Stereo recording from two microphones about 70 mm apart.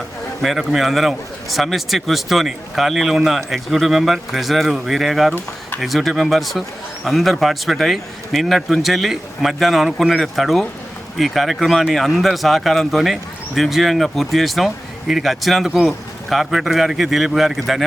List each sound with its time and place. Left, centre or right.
0.4 s a man's voice: centre